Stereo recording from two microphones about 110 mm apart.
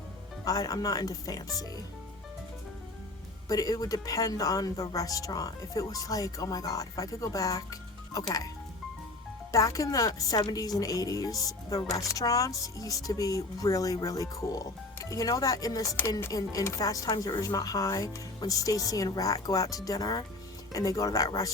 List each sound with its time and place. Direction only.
0.4 s speech: 35° left (ahead or behind)
3.5 s speech: 35° left (ahead or behind)
9.5 s speech: 30° left (ahead or behind)